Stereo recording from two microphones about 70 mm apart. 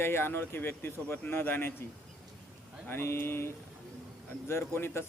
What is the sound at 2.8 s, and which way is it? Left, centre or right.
Speech, left.